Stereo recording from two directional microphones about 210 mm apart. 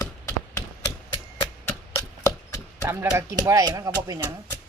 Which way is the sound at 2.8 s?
10° right (ahead or behind).